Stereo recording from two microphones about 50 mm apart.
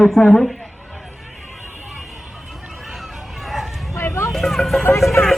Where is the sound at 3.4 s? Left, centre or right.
Centre.